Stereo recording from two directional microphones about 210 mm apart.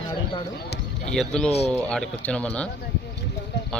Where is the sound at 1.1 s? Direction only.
Centre (ahead or behind).